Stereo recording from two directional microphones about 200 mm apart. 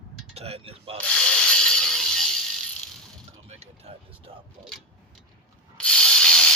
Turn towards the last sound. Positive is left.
turn(degrees=5)  # may be behind; listen again after turning